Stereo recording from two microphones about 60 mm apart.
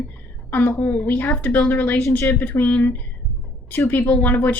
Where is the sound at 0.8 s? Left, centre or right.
Left.